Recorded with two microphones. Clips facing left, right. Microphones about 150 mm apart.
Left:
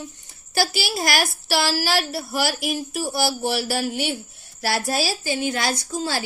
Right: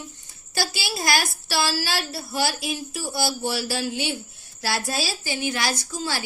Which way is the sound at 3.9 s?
35° left (ahead or behind).